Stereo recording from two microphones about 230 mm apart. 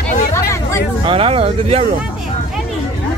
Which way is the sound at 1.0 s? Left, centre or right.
Right.